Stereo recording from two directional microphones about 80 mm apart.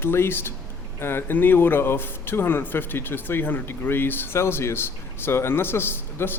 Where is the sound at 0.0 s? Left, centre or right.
Left.